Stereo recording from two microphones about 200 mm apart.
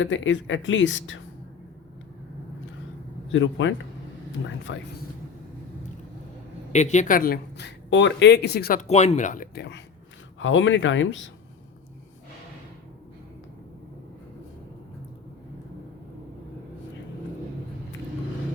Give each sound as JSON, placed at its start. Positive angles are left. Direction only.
{"t": 0.0, "sound": "speech", "side_deg": 70}
{"t": 3.3, "sound": "speech", "side_deg": 70}
{"t": 6.7, "sound": "speech", "side_deg": 35}
{"t": 10.4, "sound": "speech", "side_deg": 70}